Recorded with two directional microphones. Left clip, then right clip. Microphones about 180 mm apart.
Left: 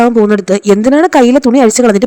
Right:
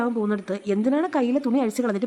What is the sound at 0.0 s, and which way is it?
A woman's voice, 45° left (ahead or behind).